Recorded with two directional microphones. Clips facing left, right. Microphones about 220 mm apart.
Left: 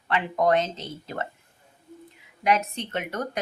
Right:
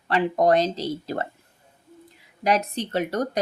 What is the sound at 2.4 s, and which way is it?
Speech, 35° right (ahead or behind).